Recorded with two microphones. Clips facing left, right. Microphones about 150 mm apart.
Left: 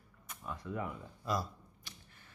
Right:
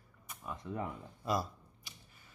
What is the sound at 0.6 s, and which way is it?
Speech, 25° right (ahead or behind).